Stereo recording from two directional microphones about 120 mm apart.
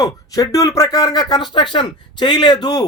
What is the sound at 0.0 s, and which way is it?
Speech, 30° left (ahead or behind).